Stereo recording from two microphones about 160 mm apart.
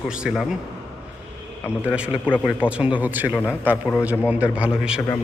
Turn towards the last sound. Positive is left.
turn(degrees=-5)  # may be behind; listen again after turning